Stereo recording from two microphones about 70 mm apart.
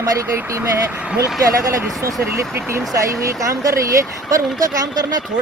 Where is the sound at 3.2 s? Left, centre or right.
Right.